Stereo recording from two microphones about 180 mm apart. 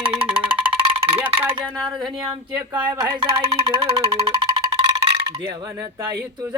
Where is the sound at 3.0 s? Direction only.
20° right (ahead or behind).